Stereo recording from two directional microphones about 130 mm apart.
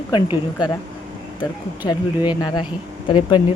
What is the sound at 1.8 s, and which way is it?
Speech, 35° left (ahead or behind).